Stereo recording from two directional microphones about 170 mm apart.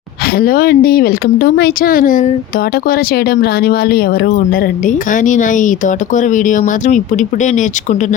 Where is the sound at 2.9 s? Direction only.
65° left (ahead or behind).